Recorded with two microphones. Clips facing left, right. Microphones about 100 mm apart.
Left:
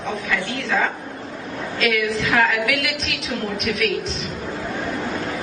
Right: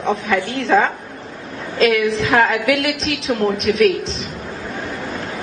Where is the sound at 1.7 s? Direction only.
30° right (ahead or behind).